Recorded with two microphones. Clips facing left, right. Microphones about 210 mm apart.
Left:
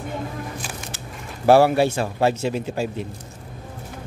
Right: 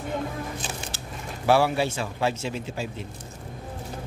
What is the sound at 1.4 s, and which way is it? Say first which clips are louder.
Speech: left 7 dB; 45° left (ahead or behind).